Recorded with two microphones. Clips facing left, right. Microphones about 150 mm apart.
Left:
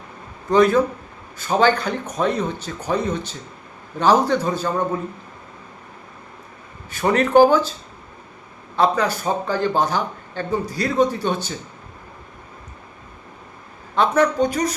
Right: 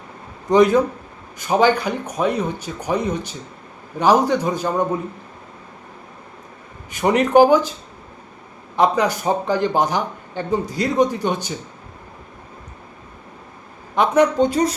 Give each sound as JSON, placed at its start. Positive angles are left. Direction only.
{"t": 0.5, "sound": "speech", "side_deg": -15}
{"t": 6.9, "sound": "speech", "side_deg": -15}
{"t": 8.7, "sound": "speech", "side_deg": -15}
{"t": 13.9, "sound": "speech", "side_deg": -15}